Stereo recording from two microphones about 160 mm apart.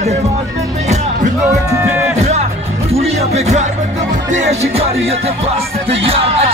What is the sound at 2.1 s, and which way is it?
Music, 45° right (ahead or behind).